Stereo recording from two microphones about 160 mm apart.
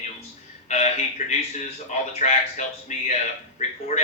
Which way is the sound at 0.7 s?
45° left (ahead or behind).